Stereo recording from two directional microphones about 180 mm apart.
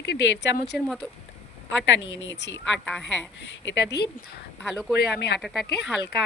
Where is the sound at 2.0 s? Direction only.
90° left.